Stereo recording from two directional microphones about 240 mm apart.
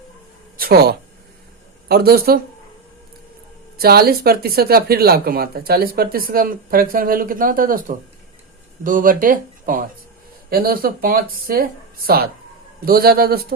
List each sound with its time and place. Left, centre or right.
0.5 s a sound: right
1.9 s speech: right
3.8 s speech: right